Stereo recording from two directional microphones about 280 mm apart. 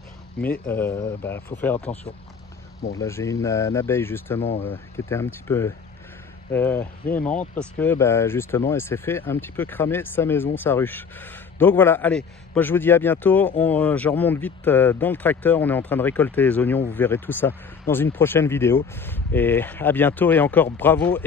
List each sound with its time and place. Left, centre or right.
0.4 s speech: centre
3.0 s speech: centre
4.4 s speech: left
4.6 s speech: centre